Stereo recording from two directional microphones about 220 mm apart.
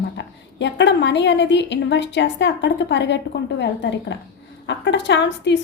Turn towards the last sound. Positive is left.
turn(degrees=55)  # may be behind; listen again after turning